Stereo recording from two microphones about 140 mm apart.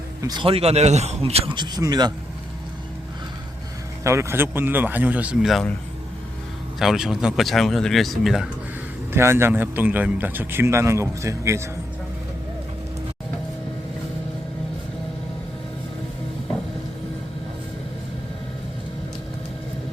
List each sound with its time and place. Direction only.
0.2 s speech: 30° right (ahead or behind)
0.4 s speech: 45° right (ahead or behind)
1.5 s speech: 30° right (ahead or behind)
4.0 s a man's voice: 20° right (ahead or behind); by 5.7 s centre (ahead or behind)
6.7 s speech: 5° right (ahead or behind)
9.1 s a man's voice: 15° right (ahead or behind)